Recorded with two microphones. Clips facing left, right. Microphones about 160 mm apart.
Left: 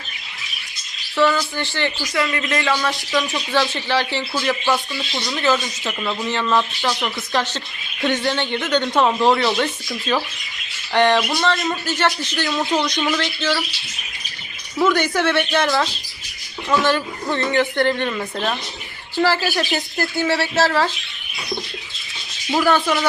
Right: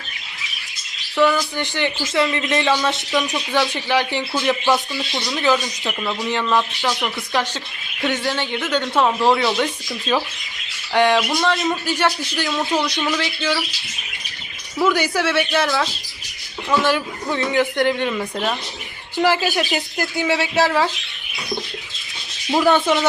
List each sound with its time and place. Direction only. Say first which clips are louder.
1.1 s bird: right 1 dB; 10° right (ahead or behind)
1.5 s a woman's voice: right 1 dB; 15° right (ahead or behind)
10.9 s a woman's voice: even; 10° right (ahead or behind)
14.8 s a woman's voice: left 1 dB; 10° right (ahead or behind)
19.1 s a woman's voice: right 1 dB; 15° right (ahead or behind)
22.6 s speech: right 2 dB; 20° right (ahead or behind)